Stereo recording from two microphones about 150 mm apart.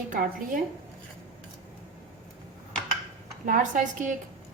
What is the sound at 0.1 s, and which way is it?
Speech, 65° right (ahead or behind).